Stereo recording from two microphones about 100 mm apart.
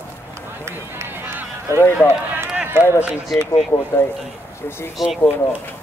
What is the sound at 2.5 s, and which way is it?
Run, 20° right (ahead or behind).